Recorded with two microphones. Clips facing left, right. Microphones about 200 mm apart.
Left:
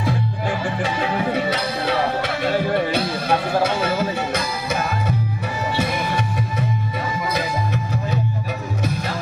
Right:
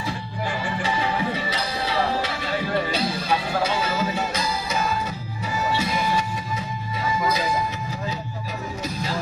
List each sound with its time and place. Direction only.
0.0 s music: 55° left (ahead or behind)